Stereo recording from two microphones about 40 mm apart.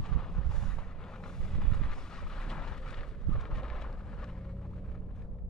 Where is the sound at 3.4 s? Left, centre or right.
Centre.